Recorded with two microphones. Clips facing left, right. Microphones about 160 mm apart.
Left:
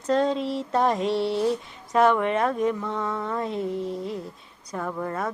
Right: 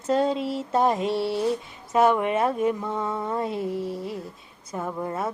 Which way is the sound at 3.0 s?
20° right (ahead or behind).